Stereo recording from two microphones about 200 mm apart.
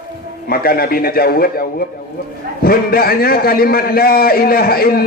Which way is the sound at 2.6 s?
50° left (ahead or behind).